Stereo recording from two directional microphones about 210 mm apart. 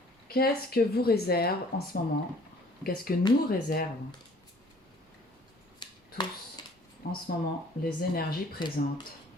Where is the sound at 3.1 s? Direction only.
45° left (ahead or behind).